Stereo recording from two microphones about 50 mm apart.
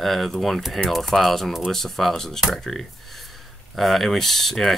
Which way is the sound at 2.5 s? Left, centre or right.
Centre.